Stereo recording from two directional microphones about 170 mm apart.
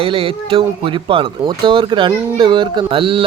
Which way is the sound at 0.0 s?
35° right (ahead or behind).